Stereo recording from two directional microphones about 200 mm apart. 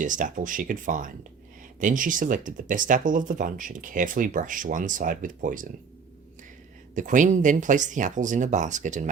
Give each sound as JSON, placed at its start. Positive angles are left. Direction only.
{"t": 0.0, "sound": "speech", "side_deg": -40}
{"t": 6.9, "sound": "speech", "side_deg": -40}